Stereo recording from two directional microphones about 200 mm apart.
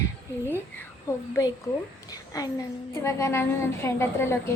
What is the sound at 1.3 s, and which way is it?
Speech, 15° left (ahead or behind).